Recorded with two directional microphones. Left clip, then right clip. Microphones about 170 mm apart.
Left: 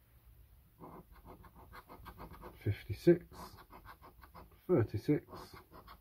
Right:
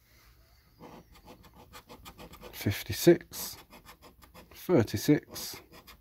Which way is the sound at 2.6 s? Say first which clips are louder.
Right 6 dB; 50° right (ahead or behind).